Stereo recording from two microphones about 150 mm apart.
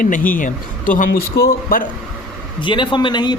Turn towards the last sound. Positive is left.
turn(degrees=30)  # may be behind; listen again after turning